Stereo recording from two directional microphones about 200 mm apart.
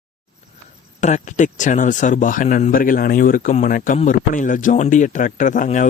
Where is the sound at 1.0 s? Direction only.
35° left (ahead or behind).